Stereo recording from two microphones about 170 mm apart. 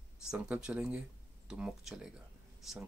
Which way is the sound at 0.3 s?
5° right (ahead or behind).